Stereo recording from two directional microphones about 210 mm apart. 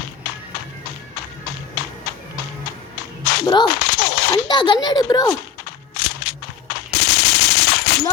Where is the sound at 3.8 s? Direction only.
50° left (ahead or behind).